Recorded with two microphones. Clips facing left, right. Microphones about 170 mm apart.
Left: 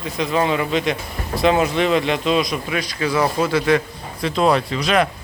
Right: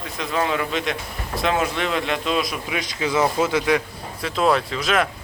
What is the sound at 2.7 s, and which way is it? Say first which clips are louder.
Speech: left 2 dB; 20° right (ahead or behind).